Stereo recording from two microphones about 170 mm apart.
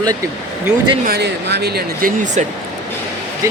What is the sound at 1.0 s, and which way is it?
Speech, 75° right (ahead or behind).